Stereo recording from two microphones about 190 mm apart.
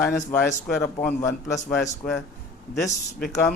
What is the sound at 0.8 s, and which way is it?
Speech, 15° left (ahead or behind).